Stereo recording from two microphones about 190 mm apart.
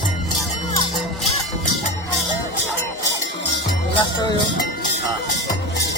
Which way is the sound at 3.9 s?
20° left (ahead or behind).